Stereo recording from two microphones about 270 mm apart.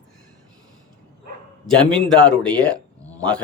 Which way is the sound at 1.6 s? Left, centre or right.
Centre.